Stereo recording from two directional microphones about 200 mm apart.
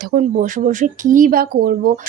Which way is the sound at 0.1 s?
40° right (ahead or behind).